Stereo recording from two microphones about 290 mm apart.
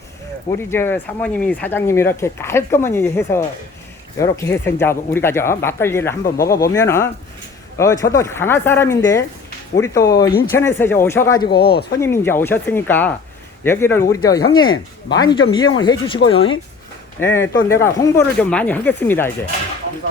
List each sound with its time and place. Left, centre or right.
0.7 s speech: centre
11.4 s speech: left
11.9 s speech: centre